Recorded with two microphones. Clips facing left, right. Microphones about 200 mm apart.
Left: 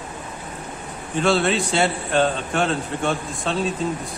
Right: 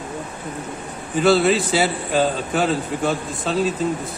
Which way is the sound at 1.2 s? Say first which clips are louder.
Right 4 dB; 5° right (ahead or behind).